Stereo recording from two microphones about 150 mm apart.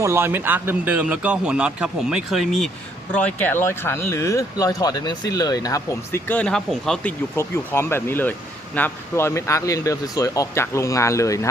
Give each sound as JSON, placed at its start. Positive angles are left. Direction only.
{"t": 0.0, "sound": "speech", "side_deg": -15}
{"t": 7.3, "sound": "speech", "side_deg": 15}